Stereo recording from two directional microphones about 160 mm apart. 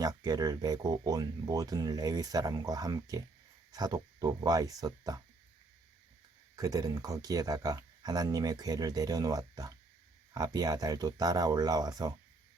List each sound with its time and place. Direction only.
0.0 s speech: 25° right (ahead or behind)
6.6 s speech: 25° right (ahead or behind)